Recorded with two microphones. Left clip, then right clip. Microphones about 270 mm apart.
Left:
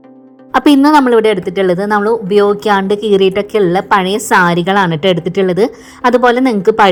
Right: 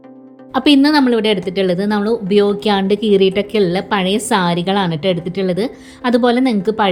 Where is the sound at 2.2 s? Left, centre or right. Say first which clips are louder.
Left 4 dB; left.